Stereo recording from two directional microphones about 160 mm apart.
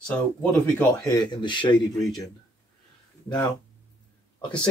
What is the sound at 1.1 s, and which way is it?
Speech, 30° left (ahead or behind).